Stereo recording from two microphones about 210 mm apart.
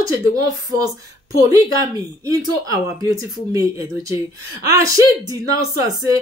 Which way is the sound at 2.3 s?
15° right (ahead or behind).